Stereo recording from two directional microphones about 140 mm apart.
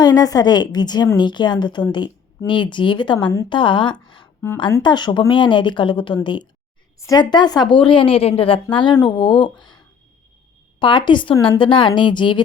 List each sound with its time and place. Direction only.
0.0 s a woman's voice: 30° left (ahead or behind)